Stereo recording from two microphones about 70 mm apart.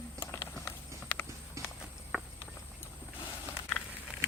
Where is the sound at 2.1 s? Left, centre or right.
Right.